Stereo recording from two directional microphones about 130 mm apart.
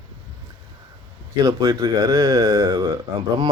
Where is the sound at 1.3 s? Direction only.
30° right (ahead or behind).